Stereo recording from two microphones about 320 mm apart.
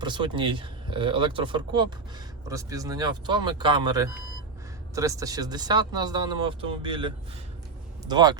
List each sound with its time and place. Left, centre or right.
0.0 s speech: centre